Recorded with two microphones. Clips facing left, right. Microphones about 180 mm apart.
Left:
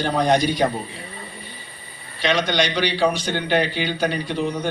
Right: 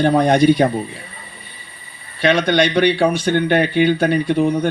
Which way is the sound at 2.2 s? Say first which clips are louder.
Right 6 dB; 55° right (ahead or behind).